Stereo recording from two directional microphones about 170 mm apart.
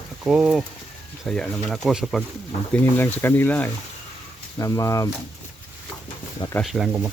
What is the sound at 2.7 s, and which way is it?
Speech, 10° left (ahead or behind).